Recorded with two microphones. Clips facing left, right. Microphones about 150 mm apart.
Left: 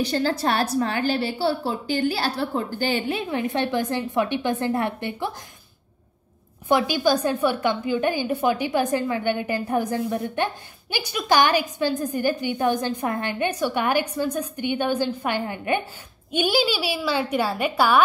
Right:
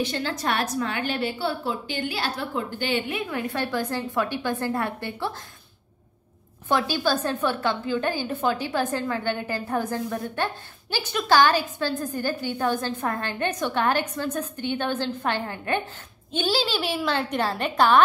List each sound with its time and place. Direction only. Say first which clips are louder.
0.0 s a woman's voice: left 4 dB; 35° left (ahead or behind); by 5.3 s 20° left (ahead or behind)
6.7 s a woman's voice: left 3 dB; 15° left (ahead or behind)